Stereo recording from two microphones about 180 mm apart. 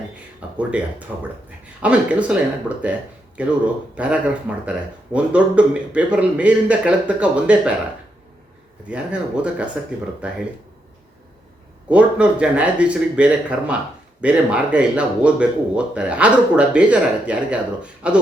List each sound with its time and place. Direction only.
0.3 s speech: 5° right (ahead or behind)
3.9 s speech: 5° right (ahead or behind)
8.9 s speech: 5° right (ahead or behind)
11.9 s speech: 5° right (ahead or behind)